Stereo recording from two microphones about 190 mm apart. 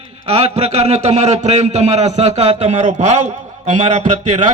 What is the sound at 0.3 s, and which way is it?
A man's voice, 35° right (ahead or behind).